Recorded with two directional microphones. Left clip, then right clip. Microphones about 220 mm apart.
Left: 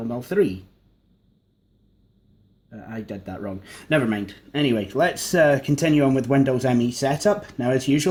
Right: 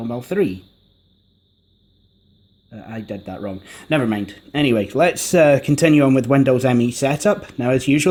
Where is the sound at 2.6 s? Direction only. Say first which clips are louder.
Right 3 dB; 30° right (ahead or behind).